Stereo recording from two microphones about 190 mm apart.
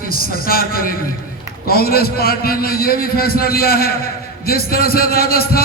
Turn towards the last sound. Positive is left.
turn(degrees=55)  # may be behind; listen again after turning